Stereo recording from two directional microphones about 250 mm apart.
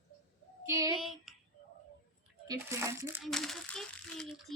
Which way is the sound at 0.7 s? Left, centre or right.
Centre.